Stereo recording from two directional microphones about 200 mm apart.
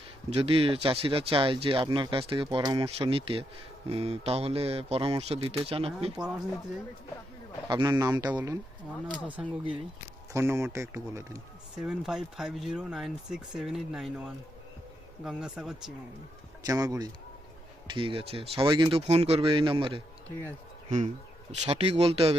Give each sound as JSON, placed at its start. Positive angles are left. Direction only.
{"t": 0.3, "sound": "speech", "side_deg": -30}
{"t": 6.1, "sound": "speech", "side_deg": -5}
{"t": 7.7, "sound": "speech", "side_deg": -20}
{"t": 8.3, "sound": "speech", "side_deg": -5}
{"t": 11.9, "sound": "speech", "side_deg": -5}
{"t": 16.6, "sound": "speech", "side_deg": -15}
{"t": 21.5, "sound": "speech", "side_deg": -30}